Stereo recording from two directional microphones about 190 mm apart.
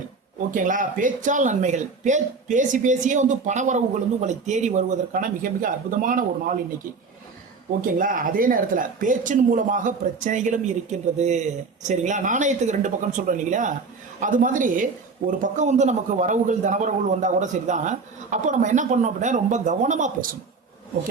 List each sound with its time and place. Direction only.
0.3 s speech: 45° right (ahead or behind)
7.8 s a woman's voice: 45° right (ahead or behind)